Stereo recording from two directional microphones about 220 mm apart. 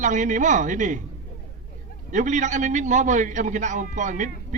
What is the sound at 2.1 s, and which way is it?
A man's voice, 35° right (ahead or behind).